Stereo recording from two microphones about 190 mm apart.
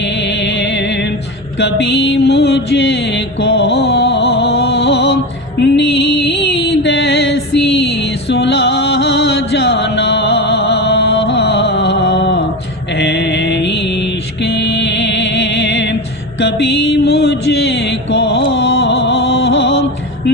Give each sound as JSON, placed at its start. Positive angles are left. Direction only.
{"t": 0.0, "sound": "music", "side_deg": 65}
{"t": 1.5, "sound": "mantra", "side_deg": 60}
{"t": 5.5, "sound": "music", "side_deg": 60}
{"t": 12.9, "sound": "mantra", "side_deg": 60}
{"t": 16.4, "sound": "music", "side_deg": 60}